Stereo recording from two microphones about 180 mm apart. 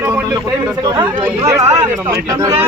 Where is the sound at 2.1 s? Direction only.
20° right (ahead or behind).